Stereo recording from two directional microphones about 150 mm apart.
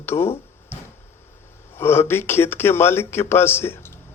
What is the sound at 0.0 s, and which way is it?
Speech, 15° left (ahead or behind).